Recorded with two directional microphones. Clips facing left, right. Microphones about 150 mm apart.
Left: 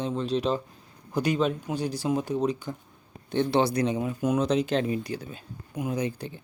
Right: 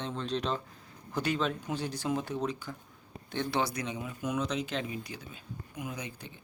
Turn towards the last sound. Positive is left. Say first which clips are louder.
# left 10 dB
turn(degrees=35)  # may be behind; listen again after turning